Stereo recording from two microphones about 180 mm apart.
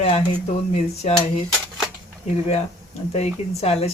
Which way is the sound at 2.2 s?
40° left (ahead or behind).